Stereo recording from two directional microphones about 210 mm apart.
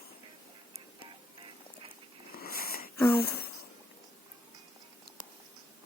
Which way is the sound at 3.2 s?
50° left (ahead or behind).